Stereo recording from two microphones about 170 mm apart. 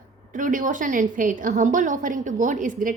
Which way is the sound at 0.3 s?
50° right (ahead or behind).